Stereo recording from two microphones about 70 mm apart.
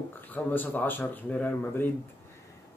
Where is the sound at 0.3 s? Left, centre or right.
Left.